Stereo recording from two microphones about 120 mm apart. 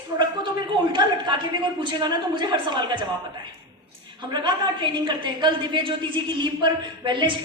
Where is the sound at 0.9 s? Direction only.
40° right (ahead or behind).